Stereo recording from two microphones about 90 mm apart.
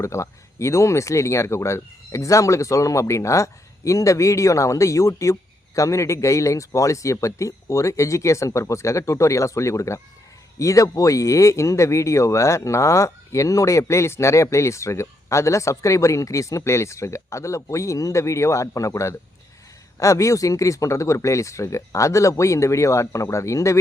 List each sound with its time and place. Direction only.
0.0 s speech: 35° left (ahead or behind)